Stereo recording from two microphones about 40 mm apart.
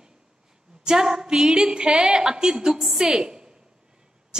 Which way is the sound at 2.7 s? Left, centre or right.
Centre.